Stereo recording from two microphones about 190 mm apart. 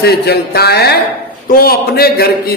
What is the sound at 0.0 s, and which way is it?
A man's voice, 55° left (ahead or behind).